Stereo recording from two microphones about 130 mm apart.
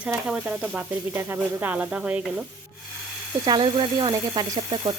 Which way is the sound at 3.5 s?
40° right (ahead or behind).